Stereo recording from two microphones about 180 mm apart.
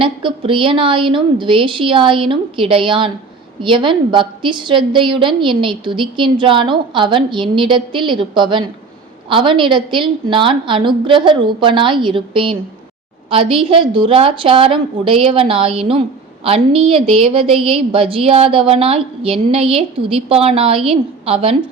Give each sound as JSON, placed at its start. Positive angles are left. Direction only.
{"t": 0.0, "sound": "a woman's voice", "side_deg": -30}